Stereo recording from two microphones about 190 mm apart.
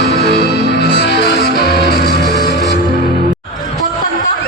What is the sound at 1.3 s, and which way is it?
Music, 50° right (ahead or behind).